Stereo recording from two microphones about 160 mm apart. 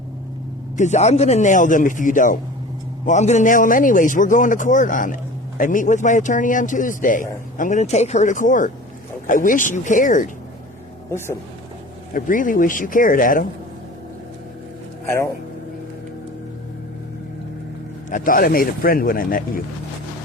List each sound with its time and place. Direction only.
0.8 s a man's voice: 45° left (ahead or behind)
12.1 s a man's voice: 55° left (ahead or behind)
15.0 s speech: 15° left (ahead or behind)
18.1 s a man's voice: 60° left (ahead or behind)